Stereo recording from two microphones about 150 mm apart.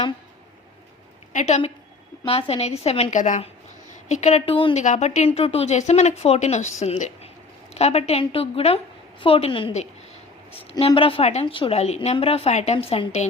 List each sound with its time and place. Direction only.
1.3 s speech: 55° left (ahead or behind); by 4.8 s 35° left (ahead or behind)
4.8 s a woman's voice: 50° left (ahead or behind); by 9.7 s 35° left (ahead or behind)
10.8 s a woman's voice: 40° left (ahead or behind)